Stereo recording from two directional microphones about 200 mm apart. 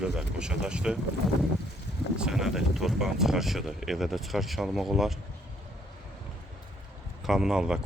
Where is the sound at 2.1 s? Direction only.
5° right (ahead or behind).